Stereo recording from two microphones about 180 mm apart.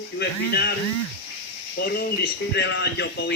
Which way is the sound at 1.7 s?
60° left (ahead or behind).